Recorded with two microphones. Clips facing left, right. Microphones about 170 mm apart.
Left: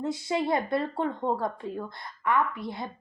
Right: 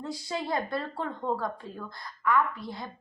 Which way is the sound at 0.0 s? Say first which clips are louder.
Left 6 dB; 20° left (ahead or behind).